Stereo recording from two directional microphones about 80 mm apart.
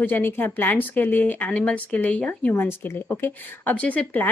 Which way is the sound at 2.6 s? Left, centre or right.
Left.